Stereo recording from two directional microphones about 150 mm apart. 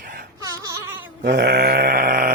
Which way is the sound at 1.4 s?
90° right.